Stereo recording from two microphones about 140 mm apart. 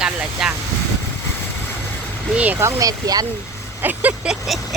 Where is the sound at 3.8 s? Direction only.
10° right (ahead or behind).